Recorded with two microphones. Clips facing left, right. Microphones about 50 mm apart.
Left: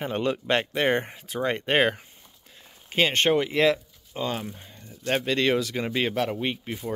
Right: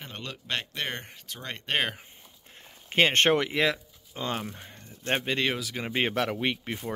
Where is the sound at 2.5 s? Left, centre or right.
Right.